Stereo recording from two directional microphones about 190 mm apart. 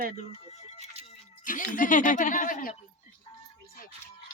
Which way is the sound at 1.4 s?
45° left (ahead or behind).